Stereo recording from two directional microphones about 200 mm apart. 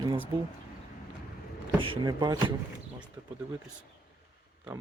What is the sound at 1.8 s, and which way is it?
Speech, 25° right (ahead or behind).